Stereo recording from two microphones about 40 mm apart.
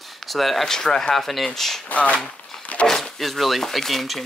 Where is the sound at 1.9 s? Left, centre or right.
Left.